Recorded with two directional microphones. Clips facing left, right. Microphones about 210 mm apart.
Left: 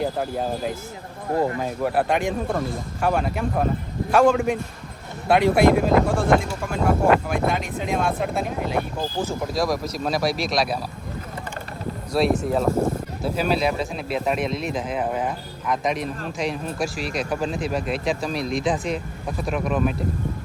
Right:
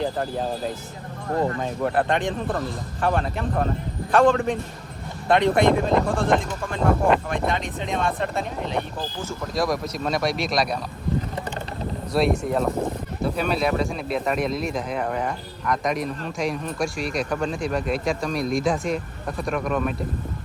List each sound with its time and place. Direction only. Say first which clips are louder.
0.0 s speech: left 1 dB; 5° left (ahead or behind)
12.1 s speech: left 1 dB; centre (ahead or behind)